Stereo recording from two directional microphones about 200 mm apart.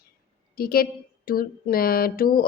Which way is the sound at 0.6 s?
50° left (ahead or behind).